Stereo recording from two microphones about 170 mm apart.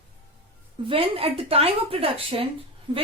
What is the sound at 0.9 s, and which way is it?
Speech, 35° right (ahead or behind).